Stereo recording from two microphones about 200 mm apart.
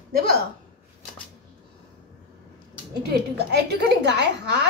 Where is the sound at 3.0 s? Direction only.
55° right (ahead or behind).